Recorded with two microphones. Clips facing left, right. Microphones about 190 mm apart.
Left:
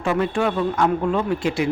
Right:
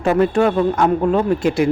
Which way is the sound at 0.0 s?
40° right (ahead or behind).